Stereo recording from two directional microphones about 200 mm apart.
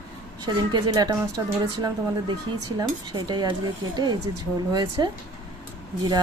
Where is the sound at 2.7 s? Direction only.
20° right (ahead or behind).